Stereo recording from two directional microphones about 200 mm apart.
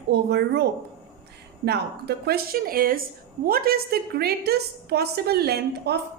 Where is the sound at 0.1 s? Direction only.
55° right (ahead or behind).